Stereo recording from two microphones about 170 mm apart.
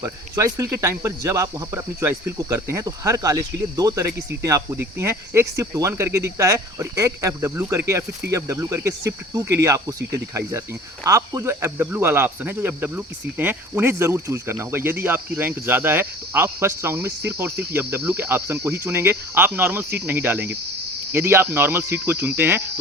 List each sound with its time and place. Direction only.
0.0 s speech: 20° right (ahead or behind)